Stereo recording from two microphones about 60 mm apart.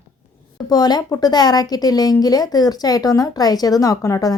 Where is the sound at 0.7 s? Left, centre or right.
Left.